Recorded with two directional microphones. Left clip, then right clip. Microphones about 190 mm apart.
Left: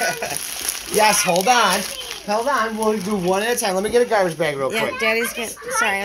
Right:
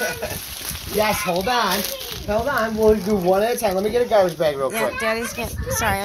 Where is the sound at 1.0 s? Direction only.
70° left (ahead or behind).